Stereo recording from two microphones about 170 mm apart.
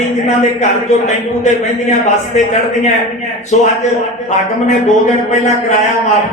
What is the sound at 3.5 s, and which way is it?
Speech, 45° left (ahead or behind).